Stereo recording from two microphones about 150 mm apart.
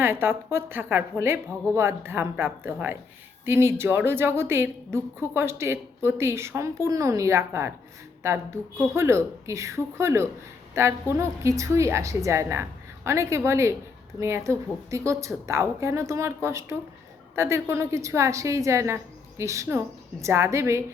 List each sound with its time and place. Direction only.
0.0 s a woman's voice: 15° right (ahead or behind)